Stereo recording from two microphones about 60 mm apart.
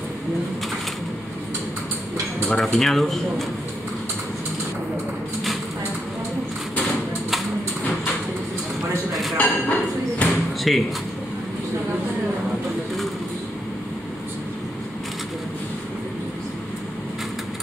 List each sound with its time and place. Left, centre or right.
2.5 s speech: centre
9.4 s a sound: left
10.7 s speech: centre